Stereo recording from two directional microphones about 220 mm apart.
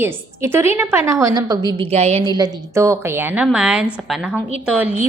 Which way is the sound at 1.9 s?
30° right (ahead or behind).